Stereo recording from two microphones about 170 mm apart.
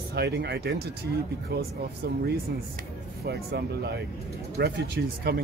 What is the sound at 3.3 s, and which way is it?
Speech, 75° right (ahead or behind).